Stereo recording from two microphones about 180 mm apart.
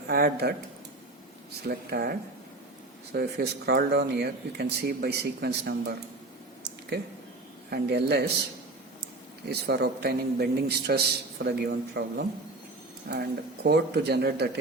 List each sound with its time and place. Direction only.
0.1 s a man's voice: 60° right (ahead or behind)
1.6 s a man's voice: 60° right (ahead or behind)
7.7 s speech: 65° right (ahead or behind)
9.5 s a man's voice: 65° right (ahead or behind)